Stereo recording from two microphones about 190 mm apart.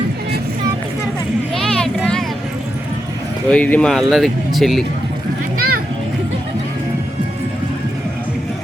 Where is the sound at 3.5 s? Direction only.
5° left (ahead or behind).